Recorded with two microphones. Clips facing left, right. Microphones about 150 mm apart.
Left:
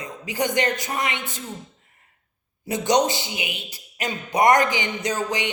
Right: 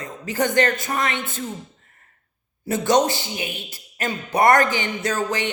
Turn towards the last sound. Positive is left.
turn(degrees=15)  # may be behind; listen again after turning